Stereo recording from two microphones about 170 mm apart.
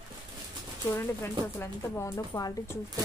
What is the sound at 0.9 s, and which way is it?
Speech, 15° left (ahead or behind).